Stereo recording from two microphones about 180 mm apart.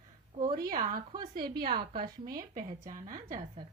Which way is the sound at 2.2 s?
50° right (ahead or behind).